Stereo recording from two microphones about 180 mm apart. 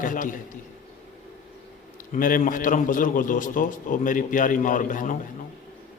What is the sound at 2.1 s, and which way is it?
A man's voice, 45° left (ahead or behind).